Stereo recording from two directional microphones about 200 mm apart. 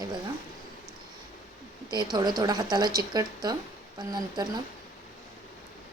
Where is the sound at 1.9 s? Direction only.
20° right (ahead or behind).